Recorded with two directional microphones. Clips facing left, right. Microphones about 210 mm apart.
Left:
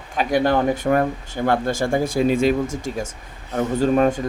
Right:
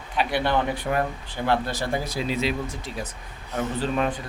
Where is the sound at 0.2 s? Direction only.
45° left (ahead or behind).